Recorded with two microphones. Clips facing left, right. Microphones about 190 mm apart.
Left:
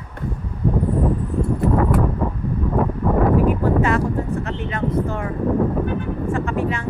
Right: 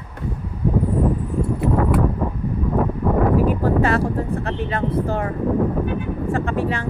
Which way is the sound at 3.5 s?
35° right (ahead or behind).